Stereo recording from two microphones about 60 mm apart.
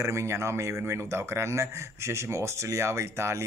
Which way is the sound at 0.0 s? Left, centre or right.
Right.